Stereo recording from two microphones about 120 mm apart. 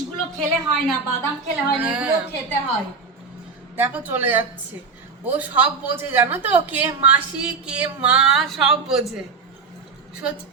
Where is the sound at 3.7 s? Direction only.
15° right (ahead or behind).